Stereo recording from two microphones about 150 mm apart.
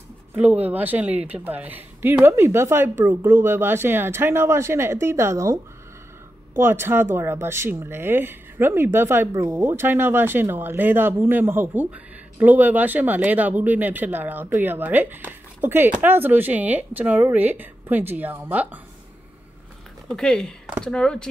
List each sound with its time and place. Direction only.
0.3 s speech: 10° right (ahead or behind)
20.2 s speech: 5° left (ahead or behind)